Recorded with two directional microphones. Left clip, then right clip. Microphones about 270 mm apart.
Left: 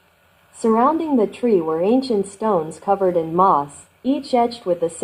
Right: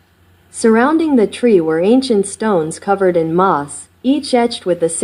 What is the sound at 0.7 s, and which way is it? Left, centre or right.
Speech, right.